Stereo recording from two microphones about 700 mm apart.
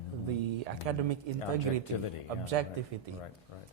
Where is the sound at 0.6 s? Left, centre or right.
Right.